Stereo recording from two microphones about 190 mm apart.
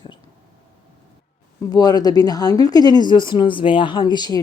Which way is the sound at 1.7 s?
20° left (ahead or behind).